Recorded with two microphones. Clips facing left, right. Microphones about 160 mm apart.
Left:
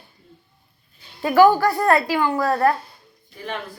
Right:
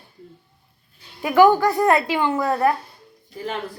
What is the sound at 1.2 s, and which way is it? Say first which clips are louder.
A woman's voice: even; 15° right (ahead or behind).